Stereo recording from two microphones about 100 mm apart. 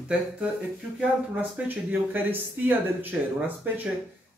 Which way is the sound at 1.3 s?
15° right (ahead or behind).